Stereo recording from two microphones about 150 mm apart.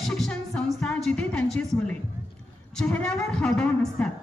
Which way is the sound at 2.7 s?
10° left (ahead or behind).